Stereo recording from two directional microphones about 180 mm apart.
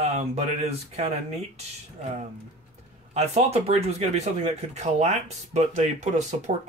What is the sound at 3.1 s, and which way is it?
Speech, 35° right (ahead or behind).